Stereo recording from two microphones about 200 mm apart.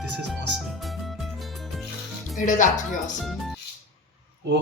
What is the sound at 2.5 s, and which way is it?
Speech, 40° left (ahead or behind).